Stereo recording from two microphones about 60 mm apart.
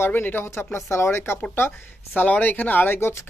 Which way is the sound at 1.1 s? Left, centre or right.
Left.